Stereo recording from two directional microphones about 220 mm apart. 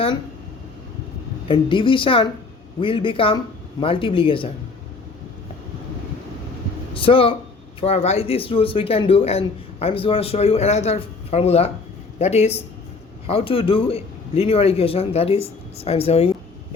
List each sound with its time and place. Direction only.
1.5 s a man's voice: 20° left (ahead or behind)
6.9 s a man's voice: 25° left (ahead or behind)